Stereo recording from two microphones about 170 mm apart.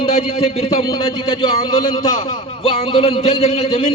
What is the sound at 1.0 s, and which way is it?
A man's voice, 25° left (ahead or behind).